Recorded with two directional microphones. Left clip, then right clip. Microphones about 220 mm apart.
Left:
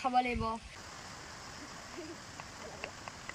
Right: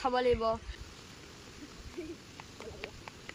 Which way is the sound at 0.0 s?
5° right (ahead or behind).